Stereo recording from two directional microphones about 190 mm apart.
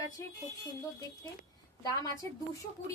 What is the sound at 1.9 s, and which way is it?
Speech, 20° left (ahead or behind).